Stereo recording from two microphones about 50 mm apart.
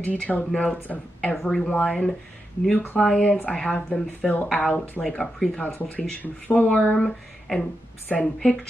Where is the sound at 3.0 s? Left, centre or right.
Centre.